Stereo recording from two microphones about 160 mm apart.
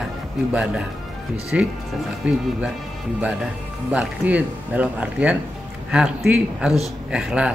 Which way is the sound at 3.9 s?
10° right (ahead or behind).